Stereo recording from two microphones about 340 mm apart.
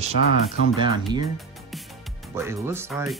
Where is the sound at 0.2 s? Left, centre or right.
Left.